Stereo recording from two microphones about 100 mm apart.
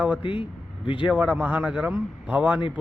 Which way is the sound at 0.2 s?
55° left (ahead or behind).